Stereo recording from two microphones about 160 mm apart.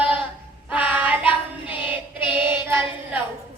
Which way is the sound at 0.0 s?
10° right (ahead or behind).